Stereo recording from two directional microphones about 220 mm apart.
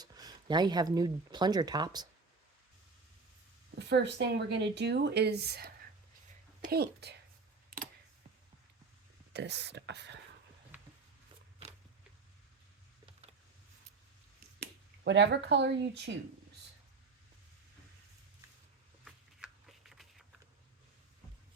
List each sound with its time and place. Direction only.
0.0 s speech: 15° right (ahead or behind)
3.8 s speech: 50° right (ahead or behind)
9.3 s speech: 50° right (ahead or behind)
14.6 s speech: 50° right (ahead or behind)
19.0 s shuffling cards: centre (ahead or behind)